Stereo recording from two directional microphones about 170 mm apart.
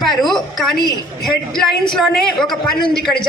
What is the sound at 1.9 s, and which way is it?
Speech, centre (ahead or behind).